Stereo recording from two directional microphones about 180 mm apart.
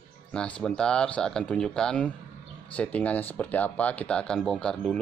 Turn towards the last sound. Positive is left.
turn(degrees=5)  # may be behind; listen again after turning